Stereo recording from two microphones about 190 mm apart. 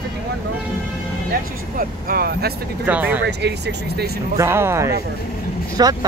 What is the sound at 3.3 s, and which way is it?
Speech, 60° right (ahead or behind).